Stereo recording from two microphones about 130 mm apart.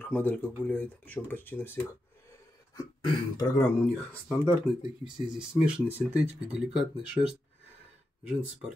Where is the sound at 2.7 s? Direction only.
30° left (ahead or behind).